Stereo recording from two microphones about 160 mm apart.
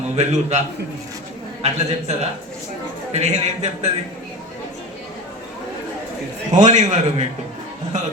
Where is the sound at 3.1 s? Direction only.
45° right (ahead or behind).